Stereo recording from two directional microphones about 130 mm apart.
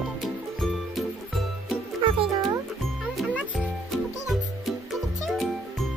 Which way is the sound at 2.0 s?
45° right (ahead or behind).